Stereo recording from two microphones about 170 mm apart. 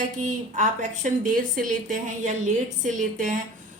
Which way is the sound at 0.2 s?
45° right (ahead or behind).